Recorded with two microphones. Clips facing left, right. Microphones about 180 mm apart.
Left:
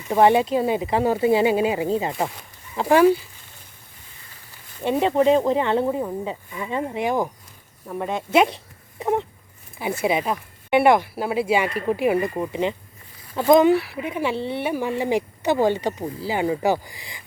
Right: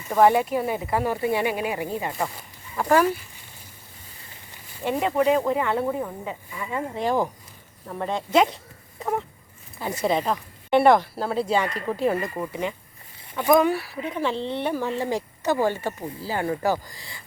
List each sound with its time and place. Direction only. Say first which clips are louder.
0.1 s speech: left 2 dB; 20° left (ahead or behind)
4.8 s speech: left 3 dB; 20° left (ahead or behind)
9.0 s a sound: left 4 dB; 20° left (ahead or behind)
10.0 s speech: even; 10° left (ahead or behind)